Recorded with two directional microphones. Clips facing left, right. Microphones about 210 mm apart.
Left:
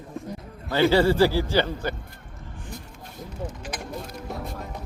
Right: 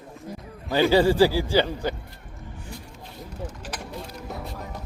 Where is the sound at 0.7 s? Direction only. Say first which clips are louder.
Even; 15° right (ahead or behind).